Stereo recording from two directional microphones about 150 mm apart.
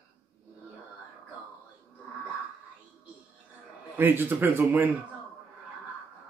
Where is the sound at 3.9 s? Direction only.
15° right (ahead or behind).